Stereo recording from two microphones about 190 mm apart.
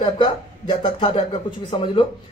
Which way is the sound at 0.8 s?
25° left (ahead or behind).